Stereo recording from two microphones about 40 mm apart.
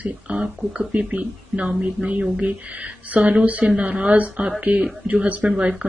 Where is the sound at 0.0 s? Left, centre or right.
Right.